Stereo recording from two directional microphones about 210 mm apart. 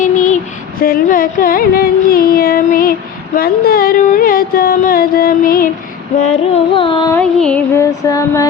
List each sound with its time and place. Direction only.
0.0 s a sound: 35° left (ahead or behind)
0.8 s music: 45° left (ahead or behind)
6.5 s carnatic music: 25° left (ahead or behind)
7.1 s music: 5° left (ahead or behind)